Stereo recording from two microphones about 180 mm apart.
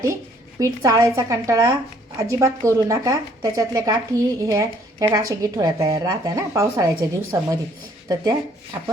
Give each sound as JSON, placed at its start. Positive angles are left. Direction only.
{"t": 0.6, "sound": "speech", "side_deg": -15}